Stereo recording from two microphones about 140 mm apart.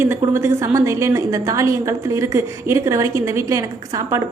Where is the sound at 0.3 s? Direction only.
20° right (ahead or behind).